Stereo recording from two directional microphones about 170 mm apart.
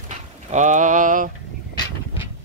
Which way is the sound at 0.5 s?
45° right (ahead or behind).